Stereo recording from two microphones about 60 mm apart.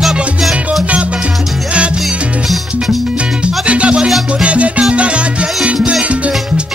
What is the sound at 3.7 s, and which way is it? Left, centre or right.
Music, centre.